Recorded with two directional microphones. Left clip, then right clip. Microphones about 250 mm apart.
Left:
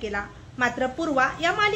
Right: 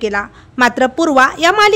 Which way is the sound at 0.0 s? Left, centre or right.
Right.